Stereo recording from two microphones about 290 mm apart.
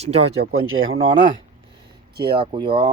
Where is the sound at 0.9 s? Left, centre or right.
Centre.